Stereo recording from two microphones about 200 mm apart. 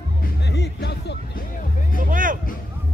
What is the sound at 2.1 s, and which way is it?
Music, 45° right (ahead or behind).